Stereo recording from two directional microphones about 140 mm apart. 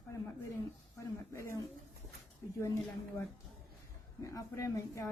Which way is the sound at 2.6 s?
20° left (ahead or behind).